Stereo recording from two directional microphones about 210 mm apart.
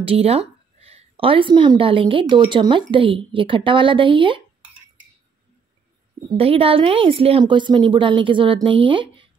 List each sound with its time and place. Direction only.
0.0 s a woman's voice: 30° right (ahead or behind)
6.3 s a woman's voice: 25° right (ahead or behind)